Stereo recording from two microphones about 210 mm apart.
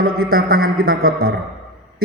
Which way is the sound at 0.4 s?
45° right (ahead or behind).